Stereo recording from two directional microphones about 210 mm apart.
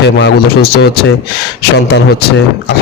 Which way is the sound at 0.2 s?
50° left (ahead or behind).